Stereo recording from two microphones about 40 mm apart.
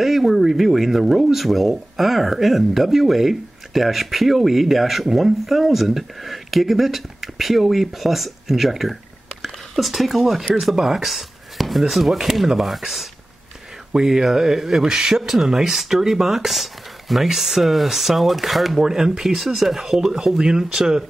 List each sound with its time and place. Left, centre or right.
0.0 s speech: centre
18.9 s speech: centre